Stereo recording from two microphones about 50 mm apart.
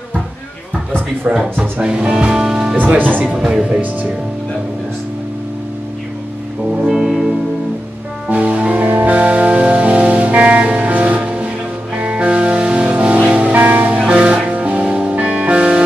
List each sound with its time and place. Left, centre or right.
1.6 s speech: centre
3.0 s speech: right
6.9 s music: centre
8.3 s music: right